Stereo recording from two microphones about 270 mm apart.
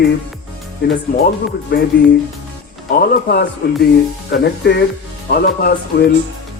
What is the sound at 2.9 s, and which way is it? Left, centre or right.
Speech, left.